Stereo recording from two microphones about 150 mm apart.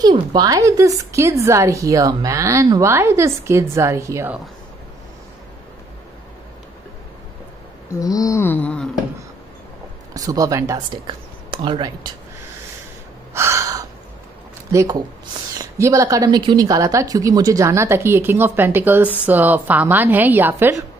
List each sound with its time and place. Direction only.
0.0 s a woman's voice: 30° right (ahead or behind)
7.9 s wail: 25° left (ahead or behind); by 8.9 s 5° left (ahead or behind)
10.1 s speech: 25° right (ahead or behind)
13.3 s gasp: 15° right (ahead or behind)
14.7 s a woman's voice: 20° right (ahead or behind)